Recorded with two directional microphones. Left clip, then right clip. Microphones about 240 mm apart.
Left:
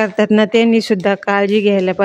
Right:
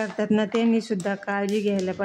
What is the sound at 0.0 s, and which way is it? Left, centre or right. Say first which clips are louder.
Speech: left 11 dB; left.